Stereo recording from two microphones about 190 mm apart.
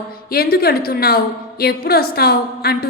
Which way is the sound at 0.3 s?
55° left (ahead or behind).